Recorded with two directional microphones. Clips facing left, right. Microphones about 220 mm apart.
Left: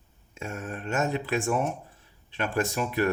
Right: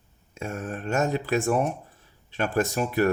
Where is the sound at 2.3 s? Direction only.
45° right (ahead or behind).